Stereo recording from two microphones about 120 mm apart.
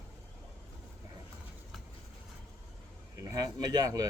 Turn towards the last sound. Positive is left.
turn(degrees=-30)  # may be behind; listen again after turning